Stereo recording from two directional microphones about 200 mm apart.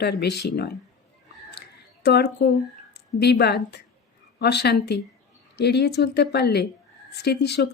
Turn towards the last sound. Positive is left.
turn(degrees=55)  # may be behind; listen again after turning